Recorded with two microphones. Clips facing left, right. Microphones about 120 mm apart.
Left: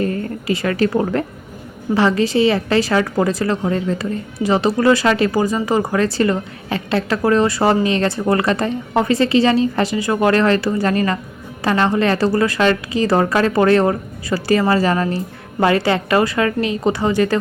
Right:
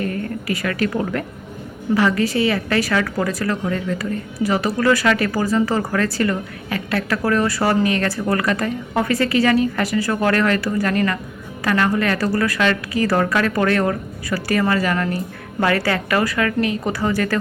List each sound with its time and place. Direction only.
0.0 s a woman's voice: 30° left (ahead or behind)